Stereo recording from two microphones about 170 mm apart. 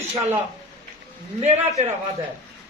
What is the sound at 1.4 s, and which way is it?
Speech, 40° right (ahead or behind).